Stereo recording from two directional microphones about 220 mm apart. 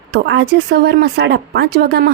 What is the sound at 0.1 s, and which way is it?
Speech, 50° right (ahead or behind).